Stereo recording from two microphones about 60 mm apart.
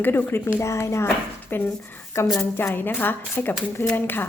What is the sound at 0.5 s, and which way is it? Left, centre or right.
A woman's voice, left.